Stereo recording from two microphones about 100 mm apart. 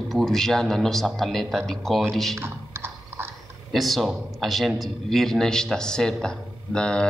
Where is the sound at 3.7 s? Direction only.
Centre (ahead or behind).